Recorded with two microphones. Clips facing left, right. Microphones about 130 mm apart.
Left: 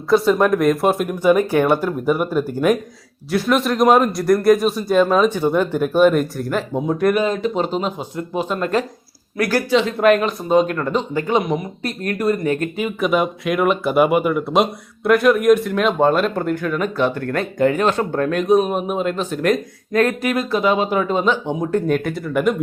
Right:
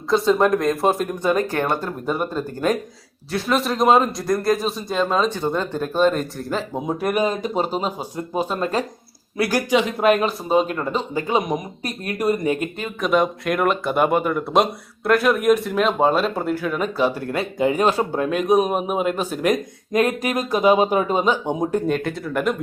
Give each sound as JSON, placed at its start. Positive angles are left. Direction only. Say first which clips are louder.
{"t": 0.1, "sound": "speech", "louder": "left 2 dB", "side_deg": 0}
{"t": 6.7, "sound": "speech", "louder": "left 5 dB", "side_deg": -10}
{"t": 7.7, "sound": "speech", "louder": "left 2 dB", "side_deg": -40}
{"t": 9.4, "sound": "speech", "louder": "left 2 dB", "side_deg": -15}
{"t": 10.2, "sound": "speech", "louder": "left 3 dB", "side_deg": -5}
{"t": 12.7, "sound": "speech", "louder": "left 2 dB", "side_deg": 5}
{"t": 21.8, "sound": "speech", "louder": "left 3 dB", "side_deg": 0}